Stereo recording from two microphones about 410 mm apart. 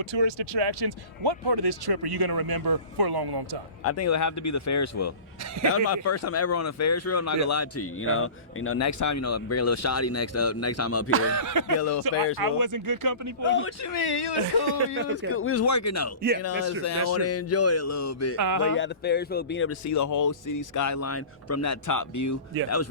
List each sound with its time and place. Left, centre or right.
0.0 s speech: right
3.8 s speech: left
11.1 s speech: right
11.8 s speech: left
12.4 s speech: right
13.4 s speech: left
13.8 s speech: left
15.3 s speech: left
18.3 s speech: right
18.8 s speech: left
19.8 s speech: left